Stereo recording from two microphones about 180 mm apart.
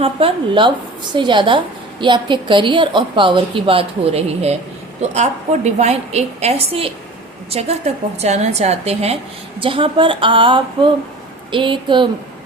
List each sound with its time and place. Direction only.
0.0 s a woman's voice: 30° right (ahead or behind)